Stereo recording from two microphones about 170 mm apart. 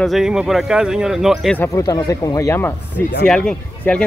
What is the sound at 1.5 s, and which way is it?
Speech, 10° left (ahead or behind).